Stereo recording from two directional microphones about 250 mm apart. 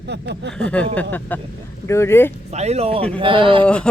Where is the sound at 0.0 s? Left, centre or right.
Right.